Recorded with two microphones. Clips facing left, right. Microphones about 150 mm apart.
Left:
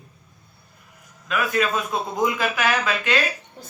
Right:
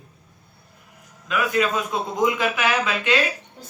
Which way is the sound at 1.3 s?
20° right (ahead or behind).